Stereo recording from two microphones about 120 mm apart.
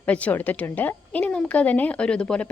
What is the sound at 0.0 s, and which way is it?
Speech, 10° left (ahead or behind).